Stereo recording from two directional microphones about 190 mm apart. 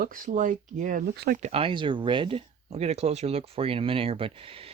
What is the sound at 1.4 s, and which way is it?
Speech, 35° right (ahead or behind).